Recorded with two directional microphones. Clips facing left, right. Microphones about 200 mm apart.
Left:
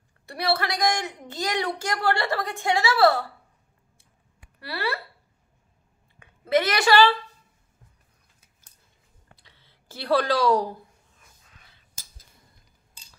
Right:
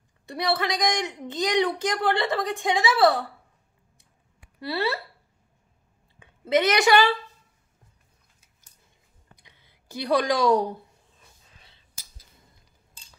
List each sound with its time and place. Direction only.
0.3 s a woman's voice: 20° right (ahead or behind)
4.6 s a woman's voice: 25° right (ahead or behind)
6.5 s a woman's voice: 20° right (ahead or behind)
9.3 s a sound: 15° right (ahead or behind)
11.5 s whispering: 25° right (ahead or behind)